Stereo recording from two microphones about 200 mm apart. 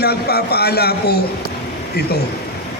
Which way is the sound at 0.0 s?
50° left (ahead or behind).